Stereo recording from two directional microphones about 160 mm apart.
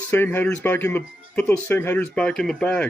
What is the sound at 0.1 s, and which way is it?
Speech, 10° left (ahead or behind).